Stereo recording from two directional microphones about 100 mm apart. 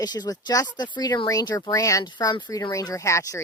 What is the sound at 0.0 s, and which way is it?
Speech, 40° left (ahead or behind).